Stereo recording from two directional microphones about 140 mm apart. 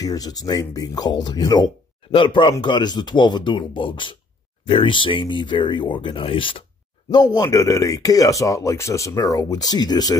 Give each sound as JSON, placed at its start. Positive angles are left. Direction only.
{"t": 0.0, "sound": "speech", "side_deg": 25}